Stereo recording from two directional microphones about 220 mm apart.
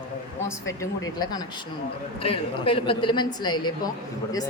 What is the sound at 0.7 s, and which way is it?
A man's voice, 15° left (ahead or behind).